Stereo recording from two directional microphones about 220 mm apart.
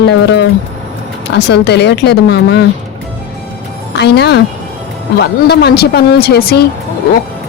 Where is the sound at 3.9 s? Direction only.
50° left (ahead or behind).